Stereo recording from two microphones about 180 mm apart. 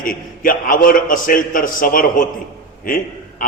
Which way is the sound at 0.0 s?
50° left (ahead or behind).